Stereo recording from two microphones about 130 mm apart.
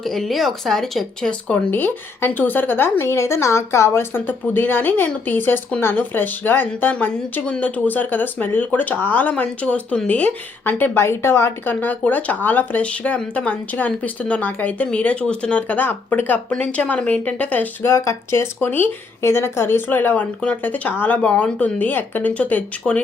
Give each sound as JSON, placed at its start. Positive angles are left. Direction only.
{"t": 0.0, "sound": "speech", "side_deg": 0}